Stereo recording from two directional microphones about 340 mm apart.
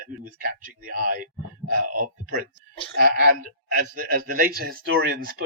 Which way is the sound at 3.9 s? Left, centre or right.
Right.